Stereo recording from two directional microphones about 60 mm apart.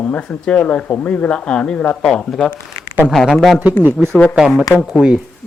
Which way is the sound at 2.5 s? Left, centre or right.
Left.